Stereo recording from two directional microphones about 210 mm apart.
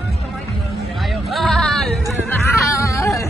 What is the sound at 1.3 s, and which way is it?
Music, centre (ahead or behind).